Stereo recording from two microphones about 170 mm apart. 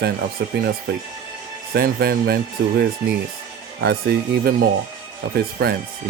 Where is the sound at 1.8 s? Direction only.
65° right (ahead or behind).